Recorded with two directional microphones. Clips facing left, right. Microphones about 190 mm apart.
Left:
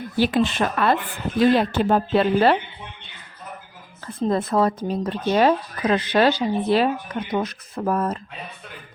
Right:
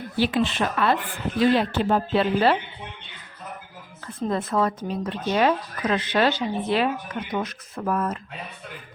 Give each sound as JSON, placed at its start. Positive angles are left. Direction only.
{"t": 0.2, "sound": "speech", "side_deg": 45}
{"t": 4.0, "sound": "speech", "side_deg": 35}